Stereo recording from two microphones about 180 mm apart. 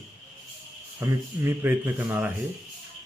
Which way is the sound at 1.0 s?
15° right (ahead or behind).